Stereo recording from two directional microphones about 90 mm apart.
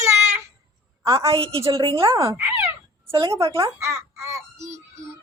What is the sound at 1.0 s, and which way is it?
A woman's voice, 35° right (ahead or behind).